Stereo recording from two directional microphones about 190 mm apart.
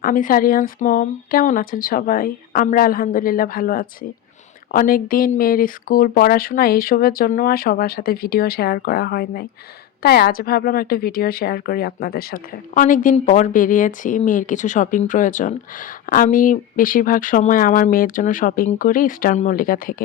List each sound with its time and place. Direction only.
0.0 s a woman's voice: 45° left (ahead or behind)